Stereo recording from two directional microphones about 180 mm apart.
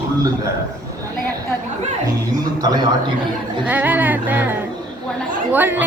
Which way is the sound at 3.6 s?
10° right (ahead or behind).